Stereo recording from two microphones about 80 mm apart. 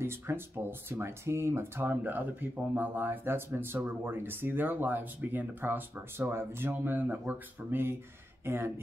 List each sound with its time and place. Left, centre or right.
0.0 s speech: right